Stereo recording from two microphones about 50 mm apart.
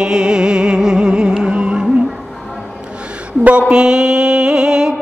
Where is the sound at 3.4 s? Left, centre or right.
Right.